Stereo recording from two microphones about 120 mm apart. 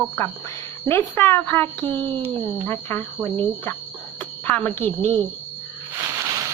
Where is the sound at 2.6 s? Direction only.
20° left (ahead or behind).